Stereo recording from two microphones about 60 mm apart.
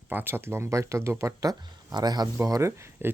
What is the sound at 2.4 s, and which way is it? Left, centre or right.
Speech, right.